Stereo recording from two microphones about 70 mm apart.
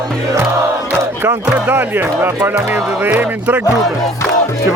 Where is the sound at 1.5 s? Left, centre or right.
Right.